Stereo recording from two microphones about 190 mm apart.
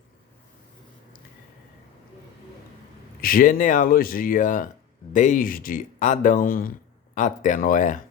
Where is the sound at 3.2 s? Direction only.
50° left (ahead or behind).